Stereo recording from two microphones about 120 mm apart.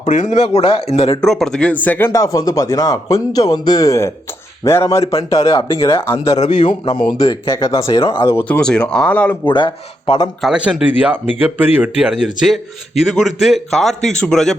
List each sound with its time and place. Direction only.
0.0 s speech: 85° left
0.4 s speech: 55° left (ahead or behind)
1.2 s speech: 5° left (ahead or behind)
2.1 s speech: 30° left (ahead or behind)
6.4 s a man's voice: 90° left
6.7 s speech: 40° left (ahead or behind); by 9.5 s 15° left (ahead or behind)
9.5 s speech: 40° left (ahead or behind)
10.4 s a man's voice: 10° right (ahead or behind)